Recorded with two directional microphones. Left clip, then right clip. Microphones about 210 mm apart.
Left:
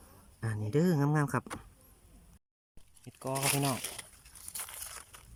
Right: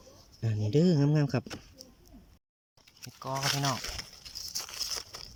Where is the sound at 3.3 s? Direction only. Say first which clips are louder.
Right 2 dB; 10° left (ahead or behind).